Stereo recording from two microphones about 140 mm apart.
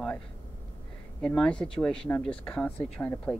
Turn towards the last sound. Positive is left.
turn(degrees=10)  # may be behind; listen again after turning